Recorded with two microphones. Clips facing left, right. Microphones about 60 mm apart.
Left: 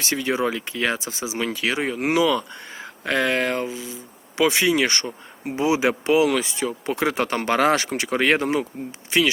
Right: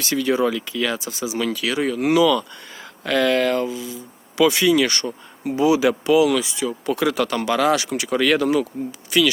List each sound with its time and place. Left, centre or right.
0.0 s speech: left